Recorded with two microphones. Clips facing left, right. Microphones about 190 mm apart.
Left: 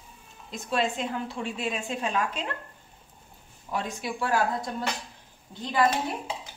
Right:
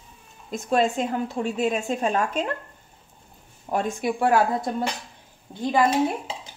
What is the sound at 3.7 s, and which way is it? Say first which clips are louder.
Speech: right 7 dB; 55° right (ahead or behind).